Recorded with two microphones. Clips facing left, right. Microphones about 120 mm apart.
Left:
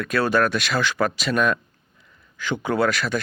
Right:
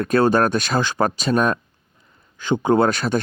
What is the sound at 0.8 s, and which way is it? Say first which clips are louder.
Speech: right 2 dB; 30° right (ahead or behind).